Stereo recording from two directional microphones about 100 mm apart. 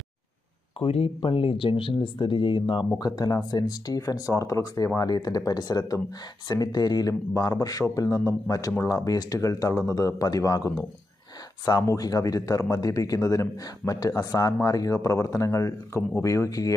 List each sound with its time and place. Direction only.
0.7 s speech: 80° left; by 2.9 s 55° left (ahead or behind)
3.0 s speech: 40° left (ahead or behind)